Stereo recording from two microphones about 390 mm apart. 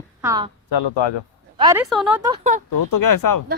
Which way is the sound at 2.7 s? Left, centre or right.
Left.